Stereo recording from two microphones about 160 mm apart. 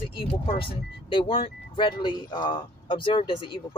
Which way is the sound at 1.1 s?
35° left (ahead or behind).